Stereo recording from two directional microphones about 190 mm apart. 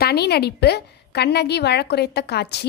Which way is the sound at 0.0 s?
55° left (ahead or behind).